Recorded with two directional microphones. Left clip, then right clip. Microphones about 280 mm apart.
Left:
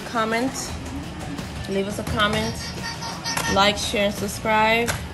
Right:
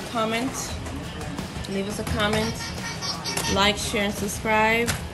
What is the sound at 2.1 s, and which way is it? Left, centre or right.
A woman's voice, centre.